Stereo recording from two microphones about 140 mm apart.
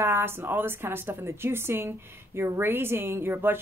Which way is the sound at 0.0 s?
15° right (ahead or behind).